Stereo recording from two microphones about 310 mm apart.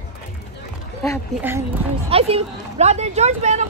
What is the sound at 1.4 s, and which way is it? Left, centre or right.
Speech, centre.